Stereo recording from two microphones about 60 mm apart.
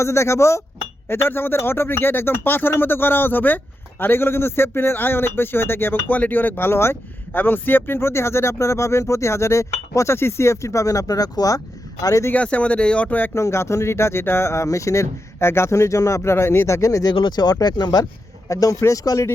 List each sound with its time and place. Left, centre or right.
0.0 s speech: left
1.0 s speech: left
7.3 s speech: left
10.2 s speech: left
12.3 s speech: left
13.3 s speech: left
17.4 s speech: left
18.4 s speech: left